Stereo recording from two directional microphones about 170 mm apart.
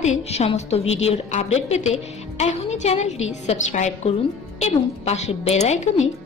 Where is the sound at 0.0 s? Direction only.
40° left (ahead or behind).